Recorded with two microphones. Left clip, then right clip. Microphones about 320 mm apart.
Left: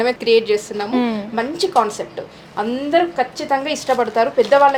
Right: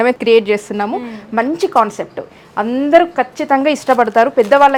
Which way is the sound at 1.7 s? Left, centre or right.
Right.